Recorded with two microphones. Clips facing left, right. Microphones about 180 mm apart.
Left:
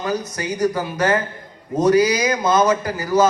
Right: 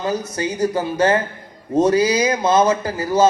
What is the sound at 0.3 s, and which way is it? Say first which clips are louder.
Speech: right 1 dB; 25° right (ahead or behind).